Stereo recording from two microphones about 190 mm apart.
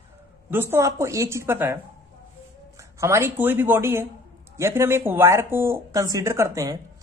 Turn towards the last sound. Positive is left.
turn(degrees=-15)  # may be behind; listen again after turning